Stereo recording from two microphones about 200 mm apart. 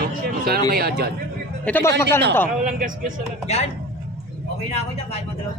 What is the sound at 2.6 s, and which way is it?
Speech, 40° right (ahead or behind).